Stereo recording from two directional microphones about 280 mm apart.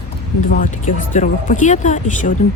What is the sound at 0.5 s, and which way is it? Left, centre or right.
Speech, left.